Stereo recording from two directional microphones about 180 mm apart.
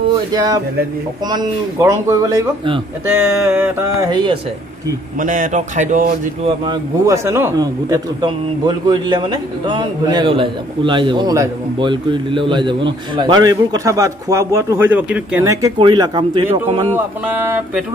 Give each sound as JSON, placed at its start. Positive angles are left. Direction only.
{"t": 0.3, "sound": "a man's voice", "side_deg": -20}
{"t": 3.2, "sound": "a sound", "side_deg": -10}
{"t": 4.1, "sound": "a man's voice", "side_deg": -25}
{"t": 5.2, "sound": "a man's voice", "side_deg": -45}
{"t": 6.4, "sound": "a man's voice", "side_deg": -30}
{"t": 7.1, "sound": "a man's voice", "side_deg": -15}
{"t": 16.9, "sound": "a sound", "side_deg": -10}